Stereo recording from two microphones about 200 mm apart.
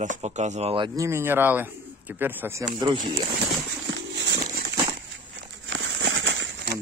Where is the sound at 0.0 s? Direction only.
35° right (ahead or behind); by 2.6 s 10° right (ahead or behind).